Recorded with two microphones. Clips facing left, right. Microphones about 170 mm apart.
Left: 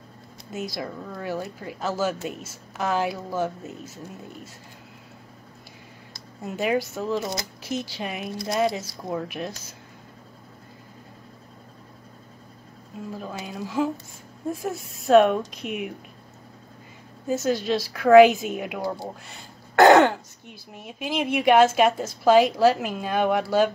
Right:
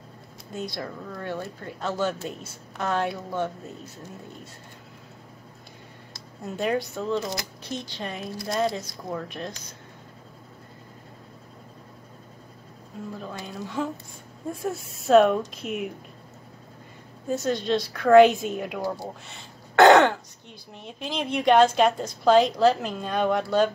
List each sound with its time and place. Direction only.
0.5 s a woman's voice: 5° left (ahead or behind)
6.4 s a woman's voice: 5° left (ahead or behind)
13.2 s a woman's voice: 5° left (ahead or behind)
17.3 s a woman's voice: 5° left (ahead or behind)
19.2 s throat clearing: centre (ahead or behind)
20.7 s a woman's voice: 5° left (ahead or behind)